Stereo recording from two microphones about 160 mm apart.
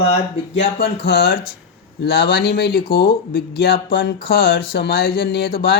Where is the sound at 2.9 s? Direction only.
70° left (ahead or behind).